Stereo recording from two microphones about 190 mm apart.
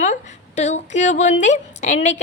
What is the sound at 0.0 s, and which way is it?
A woman's voice, 40° left (ahead or behind).